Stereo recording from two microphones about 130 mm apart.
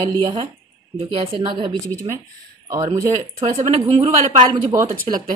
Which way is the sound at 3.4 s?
60° right (ahead or behind).